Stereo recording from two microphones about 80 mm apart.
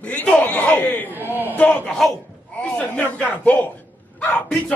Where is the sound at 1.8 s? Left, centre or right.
Centre.